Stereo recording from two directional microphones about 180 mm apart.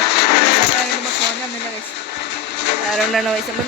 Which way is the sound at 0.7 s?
70° left (ahead or behind).